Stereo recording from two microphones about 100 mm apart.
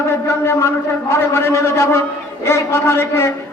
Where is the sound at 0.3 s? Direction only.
25° left (ahead or behind).